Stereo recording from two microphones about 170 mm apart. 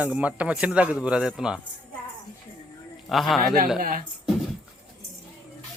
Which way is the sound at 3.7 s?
60° right (ahead or behind).